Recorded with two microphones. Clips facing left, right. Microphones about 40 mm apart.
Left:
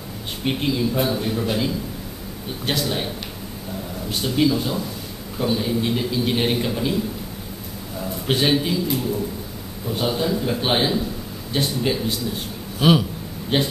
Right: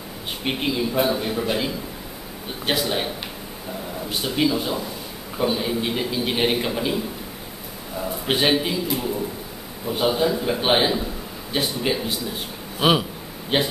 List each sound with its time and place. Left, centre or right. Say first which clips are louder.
0.4 s a man's voice: left 2 dB; centre
4.1 s a man's voice: left 2 dB; centre
8.0 s a man's voice: even; centre
9.8 s a man's voice: right 2 dB; centre